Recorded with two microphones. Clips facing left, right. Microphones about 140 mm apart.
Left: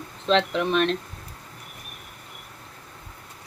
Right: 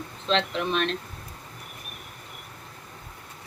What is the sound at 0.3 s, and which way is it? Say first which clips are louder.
Speech: left 4 dB; 50° left (ahead or behind).